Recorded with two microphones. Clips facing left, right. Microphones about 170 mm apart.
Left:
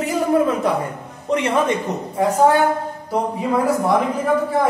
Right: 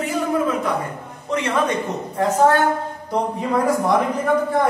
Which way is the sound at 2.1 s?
10° left (ahead or behind).